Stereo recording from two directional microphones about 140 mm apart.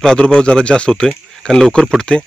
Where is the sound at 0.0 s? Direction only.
5° left (ahead or behind).